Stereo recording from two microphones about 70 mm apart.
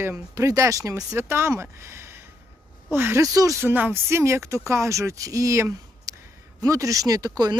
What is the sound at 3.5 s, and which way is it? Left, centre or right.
Speech, right.